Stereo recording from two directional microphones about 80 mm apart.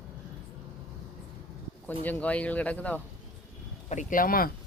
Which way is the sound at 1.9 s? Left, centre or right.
Left.